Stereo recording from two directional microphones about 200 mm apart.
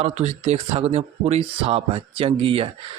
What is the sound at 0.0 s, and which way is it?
Speech, 30° right (ahead or behind).